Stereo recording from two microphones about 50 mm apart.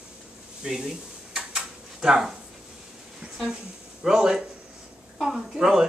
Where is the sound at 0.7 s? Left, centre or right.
Centre.